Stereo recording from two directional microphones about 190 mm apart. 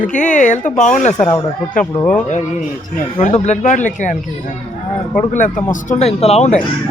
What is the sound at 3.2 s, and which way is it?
Speech, 35° left (ahead or behind).